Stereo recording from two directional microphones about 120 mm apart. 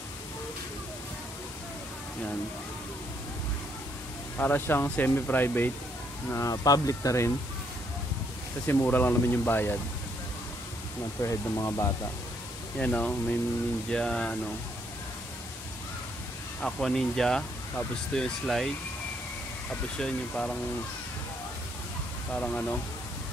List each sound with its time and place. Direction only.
4.4 s speech: 15° left (ahead or behind)
6.3 s speech: 30° left (ahead or behind)
8.6 s speech: 15° left (ahead or behind)
11.1 s speech: 25° left (ahead or behind)
12.7 s speech: 10° left (ahead or behind)
16.6 s speech: 5° left (ahead or behind)
19.7 s speech: 10° left (ahead or behind)
22.3 s speech: 10° left (ahead or behind)